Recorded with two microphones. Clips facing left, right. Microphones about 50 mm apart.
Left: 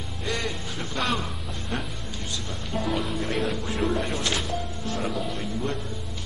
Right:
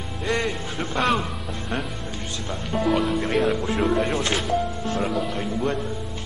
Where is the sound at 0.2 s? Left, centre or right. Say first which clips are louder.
Right 5 dB; right.